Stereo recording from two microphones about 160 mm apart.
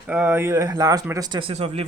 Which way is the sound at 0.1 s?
15° right (ahead or behind).